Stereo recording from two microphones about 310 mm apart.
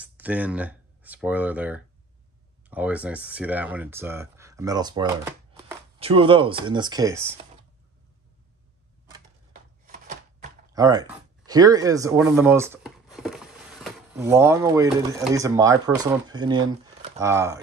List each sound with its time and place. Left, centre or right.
0.0 s speech: centre
9.5 s a sound: right
10.7 s speech: centre